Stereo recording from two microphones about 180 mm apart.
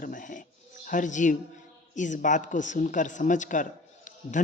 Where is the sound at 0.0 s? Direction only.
45° left (ahead or behind).